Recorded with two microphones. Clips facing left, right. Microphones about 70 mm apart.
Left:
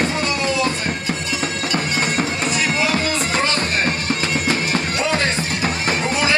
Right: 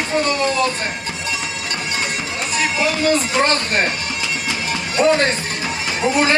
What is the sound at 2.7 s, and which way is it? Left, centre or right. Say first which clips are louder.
Music: even; left.